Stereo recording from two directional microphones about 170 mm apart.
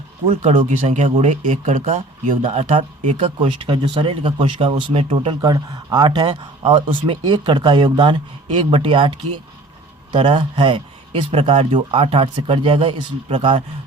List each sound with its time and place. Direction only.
0.3 s speech: 45° right (ahead or behind)